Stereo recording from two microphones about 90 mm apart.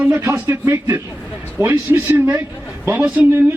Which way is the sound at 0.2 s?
30° right (ahead or behind).